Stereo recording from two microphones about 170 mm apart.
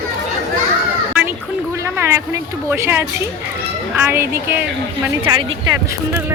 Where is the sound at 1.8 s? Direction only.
15° right (ahead or behind).